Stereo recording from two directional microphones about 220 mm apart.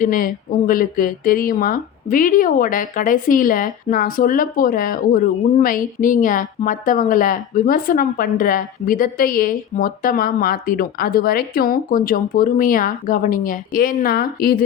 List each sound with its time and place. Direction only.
0.0 s speech: 40° left (ahead or behind)